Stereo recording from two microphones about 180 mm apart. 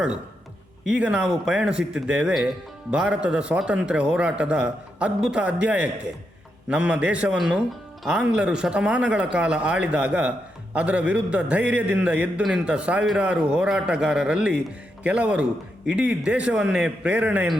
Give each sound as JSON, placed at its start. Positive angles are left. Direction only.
{"t": 0.9, "sound": "a man's voice", "side_deg": -5}